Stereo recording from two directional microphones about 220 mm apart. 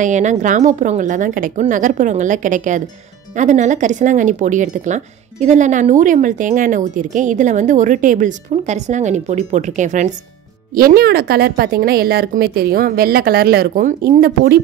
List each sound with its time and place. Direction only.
0.0 s speech: 35° right (ahead or behind)